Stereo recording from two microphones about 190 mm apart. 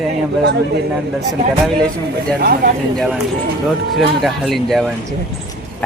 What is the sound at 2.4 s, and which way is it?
Speech, 50° right (ahead or behind).